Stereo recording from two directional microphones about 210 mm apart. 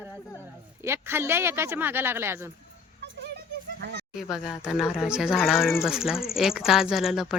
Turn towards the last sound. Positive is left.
turn(degrees=0)  # may be behind; listen again after turning